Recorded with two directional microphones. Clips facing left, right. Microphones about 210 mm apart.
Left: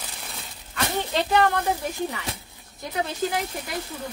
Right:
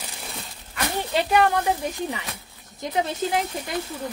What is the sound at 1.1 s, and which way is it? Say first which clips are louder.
Speech: right 2 dB; 15° right (ahead or behind).